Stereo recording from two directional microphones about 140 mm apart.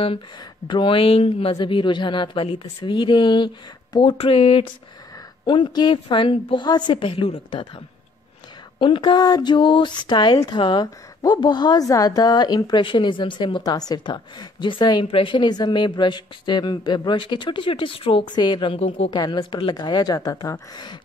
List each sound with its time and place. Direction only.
0.7 s speech: 35° left (ahead or behind)
8.7 s speech: 35° left (ahead or behind)
18.8 s speech: 45° left (ahead or behind)
19.0 s a woman's voice: 30° left (ahead or behind)